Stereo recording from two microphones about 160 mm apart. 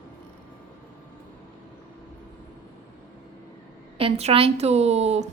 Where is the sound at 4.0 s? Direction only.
40° right (ahead or behind).